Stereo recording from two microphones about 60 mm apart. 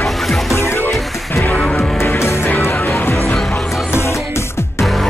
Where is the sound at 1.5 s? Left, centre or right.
Centre.